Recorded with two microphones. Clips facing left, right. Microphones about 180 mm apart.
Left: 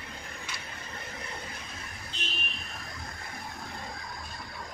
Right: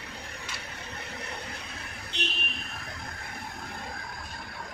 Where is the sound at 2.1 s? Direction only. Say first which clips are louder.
Right 7 dB; 75° right (ahead or behind).